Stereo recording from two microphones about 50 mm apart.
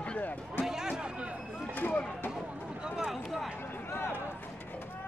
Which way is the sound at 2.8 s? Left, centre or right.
Centre.